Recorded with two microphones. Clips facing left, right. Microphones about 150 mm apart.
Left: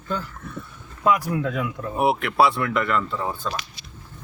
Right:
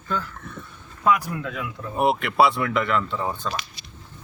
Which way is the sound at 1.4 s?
40° left (ahead or behind).